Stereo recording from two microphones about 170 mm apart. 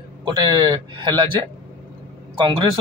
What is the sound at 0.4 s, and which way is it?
A man's voice, 25° right (ahead or behind).